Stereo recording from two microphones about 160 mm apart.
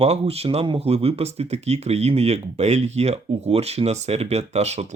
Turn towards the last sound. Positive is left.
turn(degrees=-45)  # may be behind; listen again after turning